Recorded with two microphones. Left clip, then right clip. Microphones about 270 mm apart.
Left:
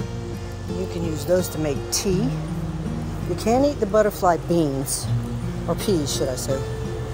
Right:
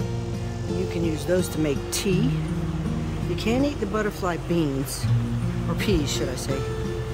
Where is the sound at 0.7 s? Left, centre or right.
Centre.